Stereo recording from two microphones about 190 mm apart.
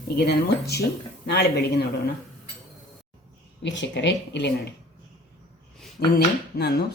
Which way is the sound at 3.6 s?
70° left (ahead or behind).